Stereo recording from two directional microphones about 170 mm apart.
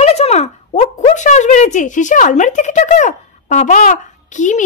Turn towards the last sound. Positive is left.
turn(degrees=45)  # may be behind; listen again after turning